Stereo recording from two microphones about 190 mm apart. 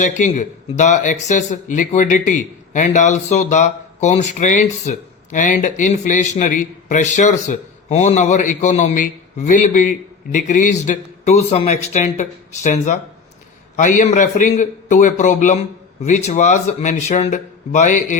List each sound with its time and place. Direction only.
0.0 s speech: 40° left (ahead or behind)